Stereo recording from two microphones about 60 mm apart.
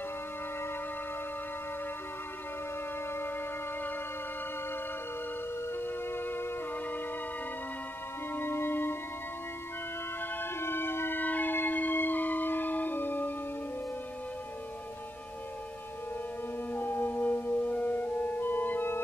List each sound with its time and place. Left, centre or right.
3.1 s music: left
5.7 s music: left
8.3 s music: left
10.2 s wind instrument: left
16.7 s music: left